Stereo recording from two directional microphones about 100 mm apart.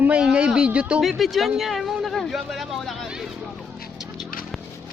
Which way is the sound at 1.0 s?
Centre (ahead or behind).